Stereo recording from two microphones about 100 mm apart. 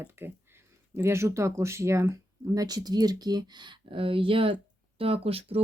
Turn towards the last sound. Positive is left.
turn(degrees=-80)